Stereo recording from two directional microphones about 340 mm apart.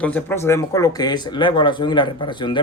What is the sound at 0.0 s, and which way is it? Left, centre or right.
Speech, centre.